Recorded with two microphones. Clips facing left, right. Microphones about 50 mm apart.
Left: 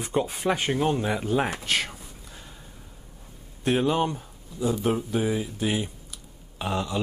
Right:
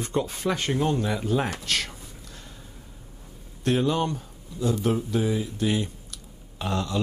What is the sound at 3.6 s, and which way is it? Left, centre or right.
Speech, centre.